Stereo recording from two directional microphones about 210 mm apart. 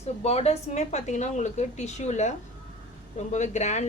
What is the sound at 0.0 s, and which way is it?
Speech, 30° left (ahead or behind).